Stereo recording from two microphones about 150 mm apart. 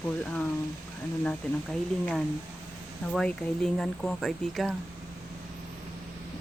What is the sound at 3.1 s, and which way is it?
Speech, 5° left (ahead or behind).